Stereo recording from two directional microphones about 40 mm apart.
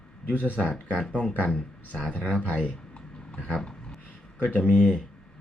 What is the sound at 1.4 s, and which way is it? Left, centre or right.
Speech, left.